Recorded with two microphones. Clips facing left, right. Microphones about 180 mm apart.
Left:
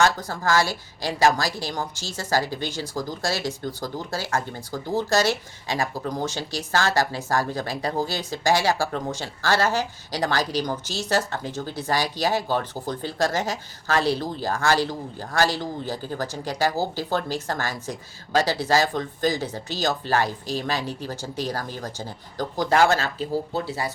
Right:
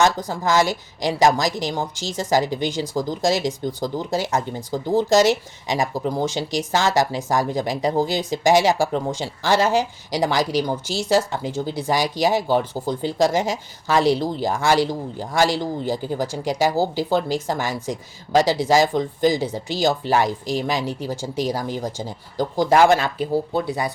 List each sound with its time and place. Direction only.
0.0 s speech: 15° right (ahead or behind)
4.3 s speech: 55° left (ahead or behind)
4.7 s speech: 15° right (ahead or behind)